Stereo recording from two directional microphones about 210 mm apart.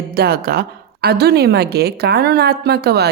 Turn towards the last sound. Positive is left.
turn(degrees=-50)  # may be behind; listen again after turning